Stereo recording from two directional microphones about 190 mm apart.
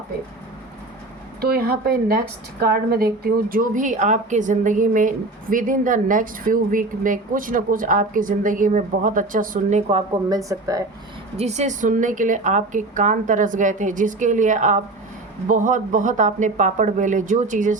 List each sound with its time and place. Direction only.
1.4 s a woman's voice: 50° right (ahead or behind)
10.2 s speech: 20° right (ahead or behind)
11.3 s a woman's voice: 35° right (ahead or behind)